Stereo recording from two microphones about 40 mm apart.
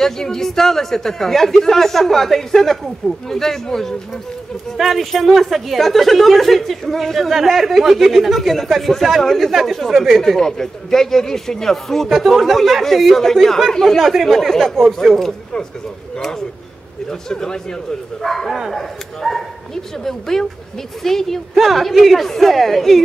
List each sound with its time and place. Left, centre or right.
0.0 s speech: centre
4.7 s speech: centre
10.2 s speech: centre
16.2 s speech: centre
18.2 s speech: centre